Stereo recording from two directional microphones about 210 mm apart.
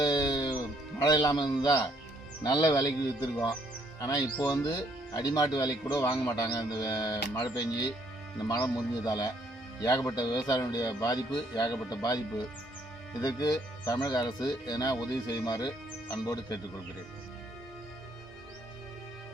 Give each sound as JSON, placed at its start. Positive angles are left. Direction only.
{"t": 0.0, "sound": "music", "side_deg": 20}
{"t": 2.4, "sound": "speech", "side_deg": 20}